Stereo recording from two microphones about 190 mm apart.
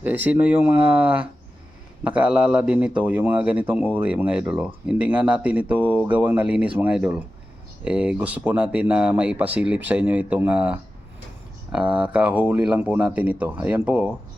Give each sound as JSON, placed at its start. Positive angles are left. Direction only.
{"t": 0.0, "sound": "a man's voice", "side_deg": -10}